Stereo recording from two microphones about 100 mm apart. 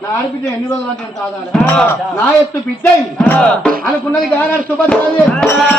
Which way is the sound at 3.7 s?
15° left (ahead or behind).